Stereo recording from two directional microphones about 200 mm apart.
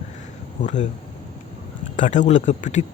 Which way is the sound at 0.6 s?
35° left (ahead or behind).